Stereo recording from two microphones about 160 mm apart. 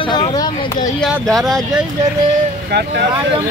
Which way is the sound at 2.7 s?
90° right.